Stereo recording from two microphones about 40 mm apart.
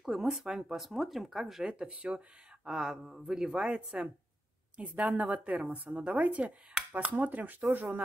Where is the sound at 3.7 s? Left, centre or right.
Right.